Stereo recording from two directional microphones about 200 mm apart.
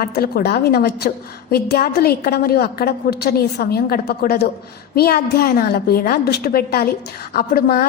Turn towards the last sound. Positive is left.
turn(degrees=50)  # may be behind; listen again after turning